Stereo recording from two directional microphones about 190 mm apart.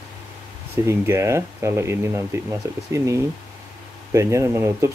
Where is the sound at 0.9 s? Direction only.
15° right (ahead or behind).